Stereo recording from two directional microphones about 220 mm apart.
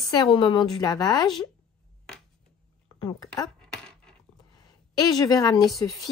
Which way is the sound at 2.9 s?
15° left (ahead or behind).